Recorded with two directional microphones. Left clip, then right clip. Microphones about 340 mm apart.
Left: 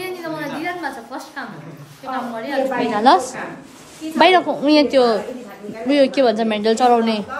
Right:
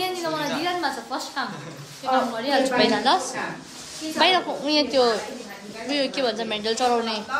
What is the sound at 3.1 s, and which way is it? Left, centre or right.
A woman's voice, centre.